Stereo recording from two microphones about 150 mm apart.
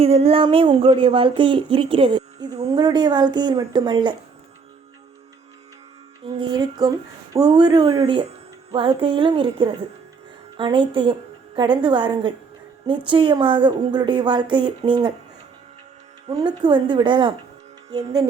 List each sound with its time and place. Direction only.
0.0 s speech: 40° right (ahead or behind)
6.2 s speech: 30° right (ahead or behind)
16.3 s speech: 30° right (ahead or behind)